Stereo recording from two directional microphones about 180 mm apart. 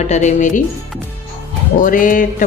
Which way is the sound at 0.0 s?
40° left (ahead or behind).